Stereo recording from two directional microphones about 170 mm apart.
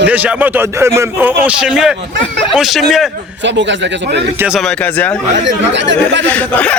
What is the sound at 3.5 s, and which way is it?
Speech, 90° right.